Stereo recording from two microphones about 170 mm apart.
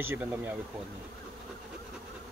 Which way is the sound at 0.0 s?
10° right (ahead or behind).